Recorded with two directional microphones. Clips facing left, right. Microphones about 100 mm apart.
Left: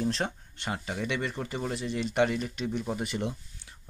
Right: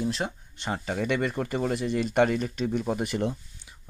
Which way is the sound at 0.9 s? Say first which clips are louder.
Right 7 dB; 50° right (ahead or behind).